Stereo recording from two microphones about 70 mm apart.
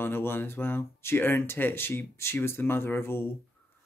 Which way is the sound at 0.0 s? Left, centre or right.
Left.